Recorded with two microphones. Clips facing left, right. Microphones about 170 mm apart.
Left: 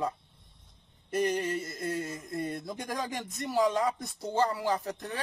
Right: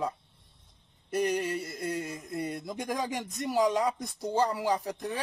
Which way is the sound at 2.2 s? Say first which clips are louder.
Even; centre (ahead or behind).